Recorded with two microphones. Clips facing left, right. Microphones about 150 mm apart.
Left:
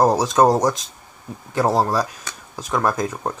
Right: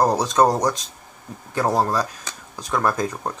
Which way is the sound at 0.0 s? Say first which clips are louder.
Left 2 dB; 10° left (ahead or behind).